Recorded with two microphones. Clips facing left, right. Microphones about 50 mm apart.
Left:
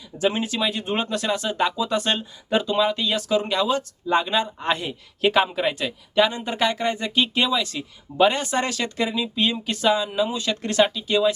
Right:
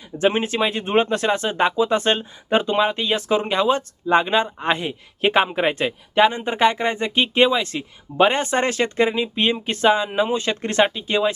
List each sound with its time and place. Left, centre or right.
0.2 s speech: right